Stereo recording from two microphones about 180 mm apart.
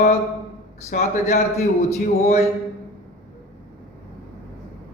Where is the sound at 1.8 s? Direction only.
40° left (ahead or behind).